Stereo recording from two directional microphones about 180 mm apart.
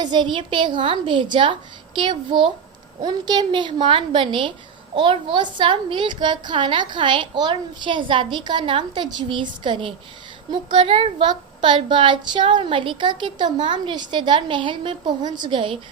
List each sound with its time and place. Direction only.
0.0 s a child's voice: 25° right (ahead or behind)